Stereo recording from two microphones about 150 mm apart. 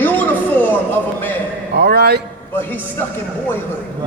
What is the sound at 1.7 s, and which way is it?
Speech, 90° right.